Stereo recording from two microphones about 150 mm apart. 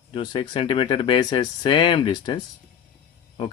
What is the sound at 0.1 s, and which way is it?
Speech, 35° left (ahead or behind).